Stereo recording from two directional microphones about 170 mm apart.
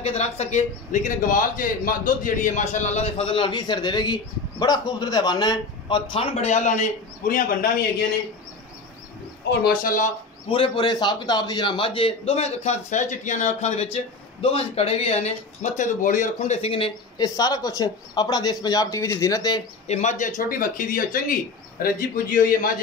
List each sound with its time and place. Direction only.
0.0 s a man's voice: 40° left (ahead or behind); by 7.7 s 55° left (ahead or behind)
9.6 s a man's voice: 55° left (ahead or behind)
10.5 s a man's voice: 30° left (ahead or behind)
17.2 s speech: 20° left (ahead or behind)
19.9 s a man's voice: 45° left (ahead or behind)